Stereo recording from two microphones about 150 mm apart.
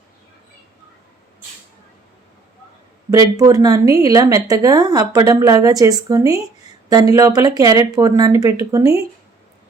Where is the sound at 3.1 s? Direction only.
25° right (ahead or behind).